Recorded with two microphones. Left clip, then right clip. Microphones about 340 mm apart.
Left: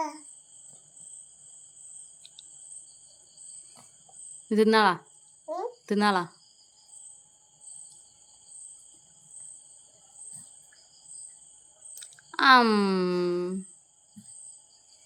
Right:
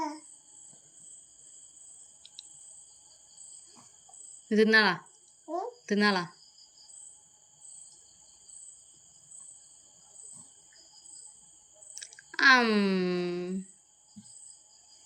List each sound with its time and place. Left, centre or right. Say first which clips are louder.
4.4 s speech: left 2 dB; centre
5.5 s a sound: left 1 dB; centre
12.3 s speech: left 3 dB; centre